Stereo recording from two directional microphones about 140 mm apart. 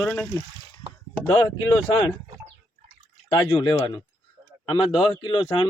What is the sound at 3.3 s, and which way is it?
Speech, 35° left (ahead or behind).